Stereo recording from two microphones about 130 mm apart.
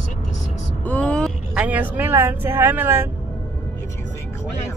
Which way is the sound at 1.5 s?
10° right (ahead or behind).